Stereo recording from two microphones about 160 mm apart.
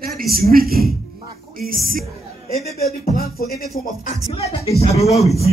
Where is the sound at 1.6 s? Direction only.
65° right (ahead or behind).